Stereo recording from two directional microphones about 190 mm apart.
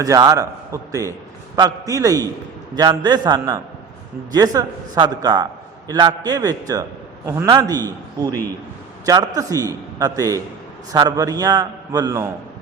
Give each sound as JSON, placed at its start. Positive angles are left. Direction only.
{"t": 0.0, "sound": "a man's voice", "side_deg": -20}